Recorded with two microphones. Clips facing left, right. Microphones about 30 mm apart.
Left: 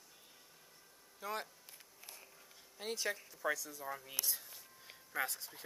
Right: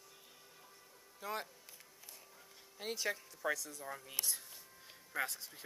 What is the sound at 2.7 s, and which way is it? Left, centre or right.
Speech, centre.